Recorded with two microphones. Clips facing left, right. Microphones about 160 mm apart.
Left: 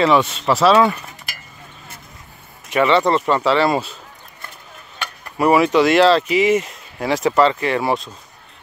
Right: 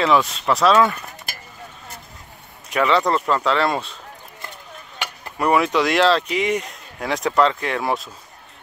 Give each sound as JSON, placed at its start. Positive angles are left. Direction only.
{"t": 0.0, "sound": "speech", "side_deg": 0}
{"t": 2.7, "sound": "speech", "side_deg": 0}
{"t": 4.9, "sound": "a sound", "side_deg": -20}
{"t": 5.4, "sound": "speech", "side_deg": 5}